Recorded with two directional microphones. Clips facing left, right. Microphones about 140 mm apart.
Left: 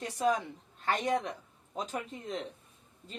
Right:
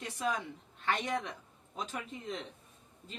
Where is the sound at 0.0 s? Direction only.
40° left (ahead or behind).